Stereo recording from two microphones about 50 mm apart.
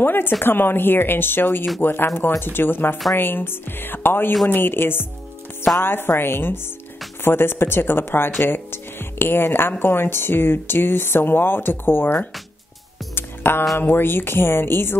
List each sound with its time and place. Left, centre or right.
0.0 s speech: left
13.1 s music: left
13.7 s speech: left